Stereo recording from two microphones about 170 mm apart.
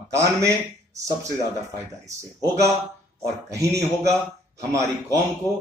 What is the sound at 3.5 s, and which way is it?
Speech, 15° right (ahead or behind).